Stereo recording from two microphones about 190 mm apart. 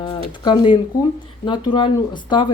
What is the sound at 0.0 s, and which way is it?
Speech, 25° left (ahead or behind).